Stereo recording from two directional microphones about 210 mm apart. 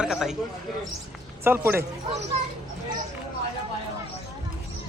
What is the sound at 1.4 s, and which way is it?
Speech, 10° right (ahead or behind).